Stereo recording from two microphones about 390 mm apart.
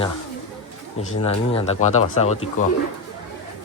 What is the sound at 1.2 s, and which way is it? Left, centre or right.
Speech, centre.